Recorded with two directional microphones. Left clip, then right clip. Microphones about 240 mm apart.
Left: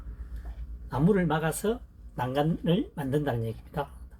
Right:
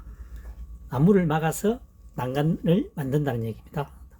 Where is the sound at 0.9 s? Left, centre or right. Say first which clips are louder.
Right 4 dB; right.